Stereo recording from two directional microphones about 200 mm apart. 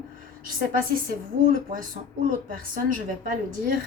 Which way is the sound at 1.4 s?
40° right (ahead or behind).